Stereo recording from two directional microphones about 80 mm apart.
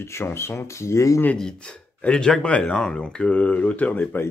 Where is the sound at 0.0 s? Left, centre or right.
Left.